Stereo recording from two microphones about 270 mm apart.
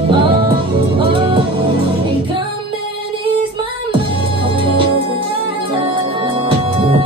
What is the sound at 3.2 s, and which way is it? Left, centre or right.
Music, centre.